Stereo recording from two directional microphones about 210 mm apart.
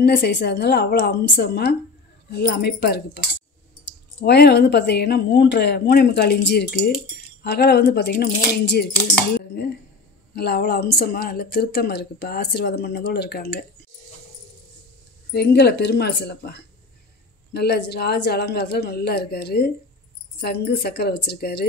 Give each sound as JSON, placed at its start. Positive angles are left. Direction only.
{"t": 0.0, "sound": "a woman's voice", "side_deg": 50}
{"t": 10.3, "sound": "a woman's voice", "side_deg": 50}
{"t": 15.3, "sound": "a woman's voice", "side_deg": 50}